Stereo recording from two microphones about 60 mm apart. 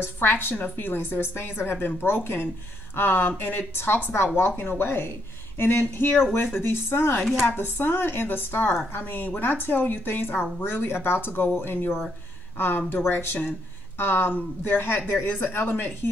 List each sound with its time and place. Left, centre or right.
0.0 s speech: left